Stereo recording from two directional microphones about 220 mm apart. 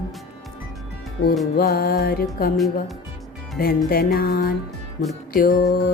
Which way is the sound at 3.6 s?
40° left (ahead or behind).